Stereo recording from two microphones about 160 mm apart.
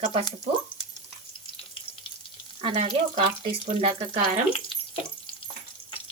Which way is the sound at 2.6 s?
40° right (ahead or behind).